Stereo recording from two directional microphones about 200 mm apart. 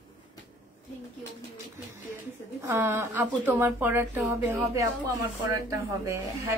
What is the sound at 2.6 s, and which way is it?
A woman's voice, 10° right (ahead or behind).